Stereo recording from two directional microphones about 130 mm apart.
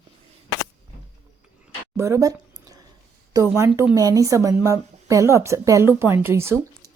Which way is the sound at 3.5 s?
20° right (ahead or behind).